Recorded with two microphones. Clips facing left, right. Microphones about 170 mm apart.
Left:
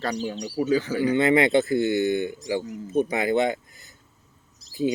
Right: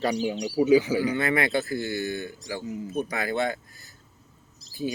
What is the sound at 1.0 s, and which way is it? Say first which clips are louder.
Speech: left 6 dB; 20° left (ahead or behind).